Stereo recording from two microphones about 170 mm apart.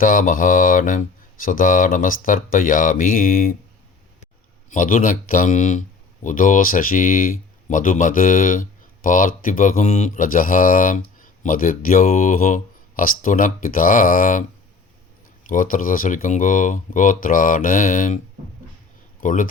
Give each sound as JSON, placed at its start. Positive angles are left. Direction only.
{"t": 0.0, "sound": "speech", "side_deg": 50}
{"t": 4.7, "sound": "speech", "side_deg": 50}
{"t": 15.4, "sound": "speech", "side_deg": 50}
{"t": 19.2, "sound": "speech", "side_deg": 50}